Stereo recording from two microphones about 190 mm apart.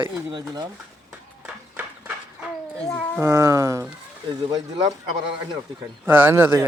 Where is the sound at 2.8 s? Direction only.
5° left (ahead or behind).